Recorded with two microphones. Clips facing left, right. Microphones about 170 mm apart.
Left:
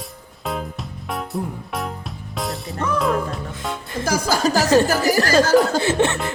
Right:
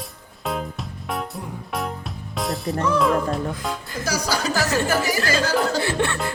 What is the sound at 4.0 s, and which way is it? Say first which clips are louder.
Music: left 5 dB; 50° left (ahead or behind).